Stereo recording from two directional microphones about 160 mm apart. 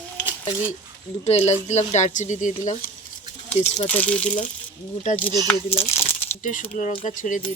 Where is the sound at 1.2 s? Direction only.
40° left (ahead or behind).